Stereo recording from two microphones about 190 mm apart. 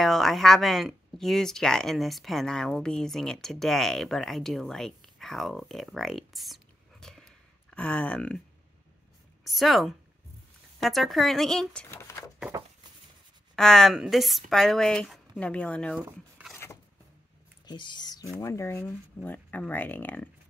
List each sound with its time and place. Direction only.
0.0 s speech: centre (ahead or behind)
9.4 s speech: centre (ahead or behind)
11.9 s a sound: 15° left (ahead or behind)
13.6 s speech: 5° left (ahead or behind)
16.0 s a sound: 10° right (ahead or behind)
17.6 s speech: 25° left (ahead or behind)